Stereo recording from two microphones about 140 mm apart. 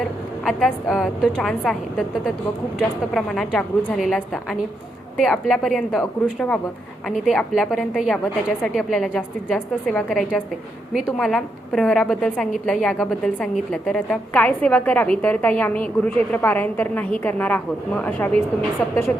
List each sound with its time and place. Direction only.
0.4 s a woman's voice: centre (ahead or behind)